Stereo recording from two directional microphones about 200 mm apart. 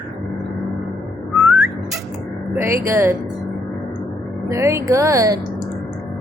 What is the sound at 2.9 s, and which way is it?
Speech, 15° right (ahead or behind).